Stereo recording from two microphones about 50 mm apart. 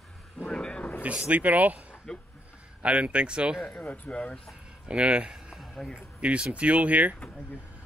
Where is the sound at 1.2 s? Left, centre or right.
Right.